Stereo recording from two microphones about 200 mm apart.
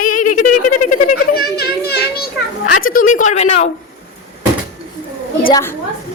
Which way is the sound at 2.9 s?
40° left (ahead or behind).